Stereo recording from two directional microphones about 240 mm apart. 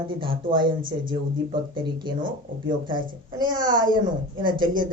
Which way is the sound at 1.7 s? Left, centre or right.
Centre.